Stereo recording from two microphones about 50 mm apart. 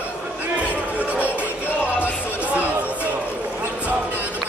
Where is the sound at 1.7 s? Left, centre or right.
Right.